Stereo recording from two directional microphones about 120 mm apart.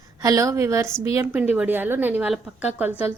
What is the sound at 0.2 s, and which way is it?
A woman's voice, 30° right (ahead or behind).